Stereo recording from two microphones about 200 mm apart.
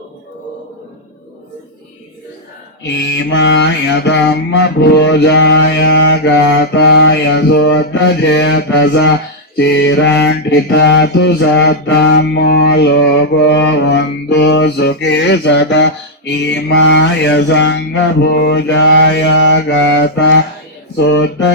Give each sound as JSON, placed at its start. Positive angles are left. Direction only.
{"t": 2.8, "sound": "mantra", "side_deg": 60}